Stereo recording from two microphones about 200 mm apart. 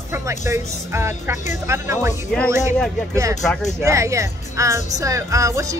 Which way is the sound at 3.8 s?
15° right (ahead or behind).